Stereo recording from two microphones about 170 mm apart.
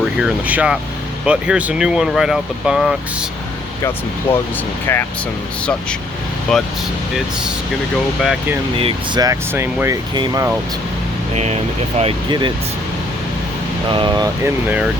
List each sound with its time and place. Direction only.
0.2 s speech: 5° right (ahead or behind)
4.9 s speech: 15° left (ahead or behind)
6.5 s speech: 5° left (ahead or behind)
8.2 s speech: 5° right (ahead or behind)
8.7 s speech: 35° right (ahead or behind)
9.2 s speech: 15° right (ahead or behind)
10.2 s speech: 25° right (ahead or behind)
11.3 s speech: 40° right (ahead or behind)
13.9 s speech: 30° right (ahead or behind)
14.4 s speech: 10° right (ahead or behind)